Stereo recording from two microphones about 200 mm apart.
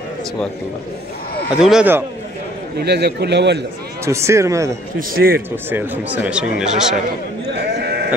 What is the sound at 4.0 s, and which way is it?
Speech, 15° right (ahead or behind).